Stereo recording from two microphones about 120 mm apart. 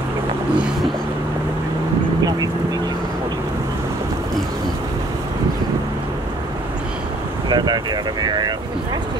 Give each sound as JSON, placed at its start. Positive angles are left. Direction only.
{"t": 7.4, "sound": "speech", "side_deg": -35}